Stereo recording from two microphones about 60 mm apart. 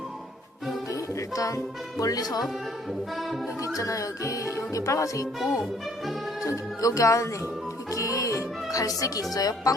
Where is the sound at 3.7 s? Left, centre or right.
Left.